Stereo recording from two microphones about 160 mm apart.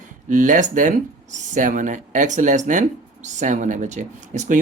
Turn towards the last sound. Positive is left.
turn(degrees=-50)  # may be behind; listen again after turning